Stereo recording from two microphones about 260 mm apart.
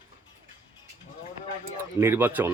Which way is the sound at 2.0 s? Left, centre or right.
Centre.